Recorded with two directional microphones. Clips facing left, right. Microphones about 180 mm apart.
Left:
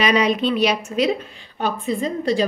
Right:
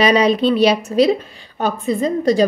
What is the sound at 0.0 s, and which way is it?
A woman's voice, 35° right (ahead or behind).